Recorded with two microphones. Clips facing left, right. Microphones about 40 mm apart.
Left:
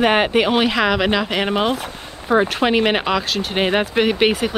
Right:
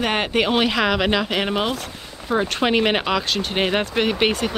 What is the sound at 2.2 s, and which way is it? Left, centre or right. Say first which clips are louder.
Speech: left 5 dB; centre.